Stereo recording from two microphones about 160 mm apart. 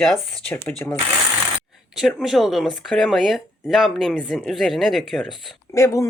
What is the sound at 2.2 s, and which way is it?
Speech, centre (ahead or behind).